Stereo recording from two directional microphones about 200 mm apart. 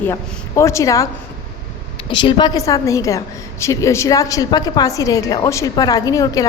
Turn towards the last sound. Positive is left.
turn(degrees=15)  # may be behind; listen again after turning